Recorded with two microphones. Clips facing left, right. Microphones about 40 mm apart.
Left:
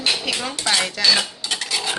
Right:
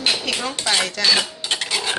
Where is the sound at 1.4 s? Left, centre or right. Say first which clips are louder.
Right 2 dB; right.